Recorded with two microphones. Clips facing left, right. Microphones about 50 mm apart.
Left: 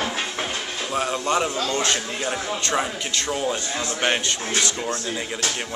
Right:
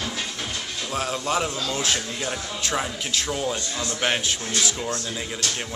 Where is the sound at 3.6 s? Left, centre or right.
Left.